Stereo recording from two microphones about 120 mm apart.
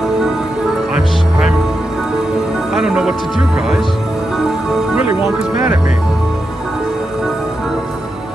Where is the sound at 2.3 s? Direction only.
5° right (ahead or behind).